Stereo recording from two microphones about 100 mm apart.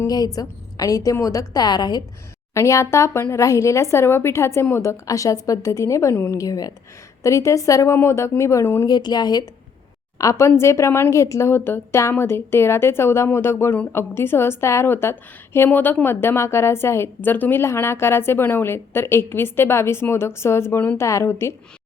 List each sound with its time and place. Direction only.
0.1 s speech: 40° left (ahead or behind)
2.6 s a woman's voice: 30° left (ahead or behind)
8.9 s a woman's voice: 45° left (ahead or behind)
10.2 s a woman's voice: 30° left (ahead or behind)